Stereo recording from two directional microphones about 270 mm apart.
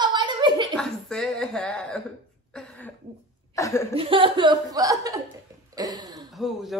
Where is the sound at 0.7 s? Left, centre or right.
Centre.